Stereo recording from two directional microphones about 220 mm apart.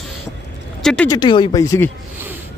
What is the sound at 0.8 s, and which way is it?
Speech, 5° left (ahead or behind).